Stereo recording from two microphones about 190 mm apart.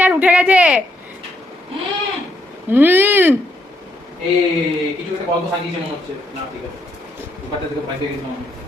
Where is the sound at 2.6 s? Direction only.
10° right (ahead or behind).